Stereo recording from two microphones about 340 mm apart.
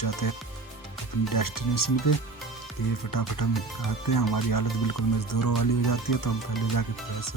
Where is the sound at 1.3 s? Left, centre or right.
Left.